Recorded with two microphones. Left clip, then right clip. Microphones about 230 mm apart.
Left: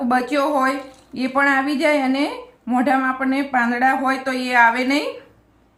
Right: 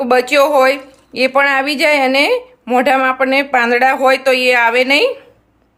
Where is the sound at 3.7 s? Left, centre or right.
Right.